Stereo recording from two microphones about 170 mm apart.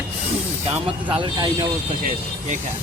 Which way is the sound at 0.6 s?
30° right (ahead or behind).